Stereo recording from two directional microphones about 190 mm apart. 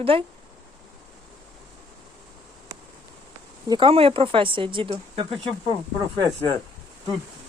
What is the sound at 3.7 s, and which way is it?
Speech, 30° right (ahead or behind).